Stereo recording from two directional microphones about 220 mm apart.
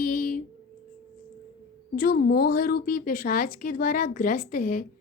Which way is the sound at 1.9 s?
40° left (ahead or behind).